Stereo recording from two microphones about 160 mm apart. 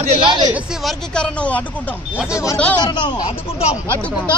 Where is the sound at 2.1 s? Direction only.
5° right (ahead or behind).